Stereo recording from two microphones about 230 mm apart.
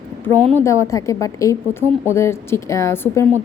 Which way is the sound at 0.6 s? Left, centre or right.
Centre.